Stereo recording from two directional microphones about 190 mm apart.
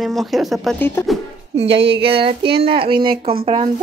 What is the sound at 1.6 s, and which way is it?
A woman's voice, 30° right (ahead or behind).